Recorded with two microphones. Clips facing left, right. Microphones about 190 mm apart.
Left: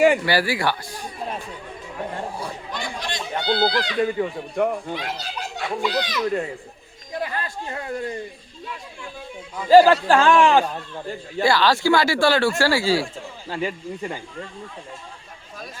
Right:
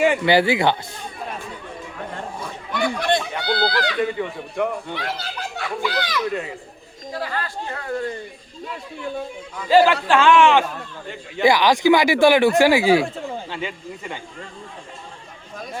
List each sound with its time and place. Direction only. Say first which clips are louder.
0.3 s speech: right 5 dB; 20° right (ahead or behind)
2.7 s a sound: right 12 dB; 60° right (ahead or behind)
3.3 s speech: left 1 dB; 20° left (ahead or behind)
4.0 s speech: left 1 dB; 35° left (ahead or behind)
4.9 s speech: right 1 dB; 20° left (ahead or behind)
7.1 s a sound: right 1 dB; 20° left (ahead or behind)
9.6 s speech: left 3 dB; 40° left (ahead or behind)
11.4 s speech: right 3 dB; 15° right (ahead or behind)
13.5 s speech: left 3 dB; 35° left (ahead or behind)